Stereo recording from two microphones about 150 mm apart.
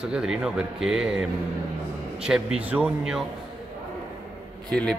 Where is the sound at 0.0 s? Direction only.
5° right (ahead or behind).